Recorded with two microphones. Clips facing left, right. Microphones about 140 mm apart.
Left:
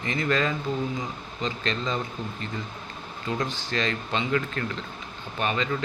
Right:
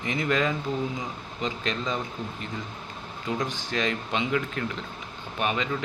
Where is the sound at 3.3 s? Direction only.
10° right (ahead or behind).